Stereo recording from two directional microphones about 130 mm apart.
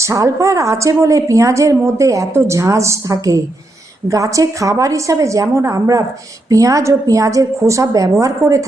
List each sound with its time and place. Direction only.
0.0 s a woman's voice: 25° right (ahead or behind)